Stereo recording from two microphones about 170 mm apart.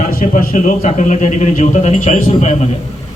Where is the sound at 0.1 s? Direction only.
60° left (ahead or behind).